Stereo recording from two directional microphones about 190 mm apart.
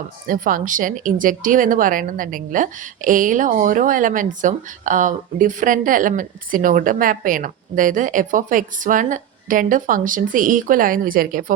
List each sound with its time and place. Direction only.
0.3 s a woman's voice: 45° right (ahead or behind)